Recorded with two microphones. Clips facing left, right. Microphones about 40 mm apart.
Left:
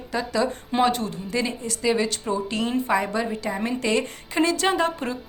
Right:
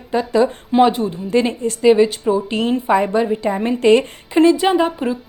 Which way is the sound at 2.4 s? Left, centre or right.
Right.